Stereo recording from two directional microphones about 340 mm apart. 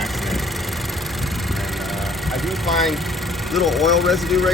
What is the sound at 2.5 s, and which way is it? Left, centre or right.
Vehicle, centre.